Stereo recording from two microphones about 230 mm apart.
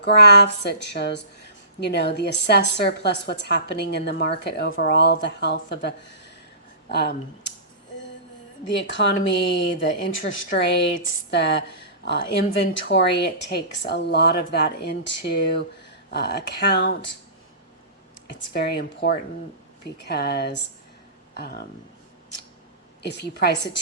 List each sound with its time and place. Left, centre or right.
0.0 s speech: left
8.6 s speech: left
18.3 s speech: left
23.0 s speech: left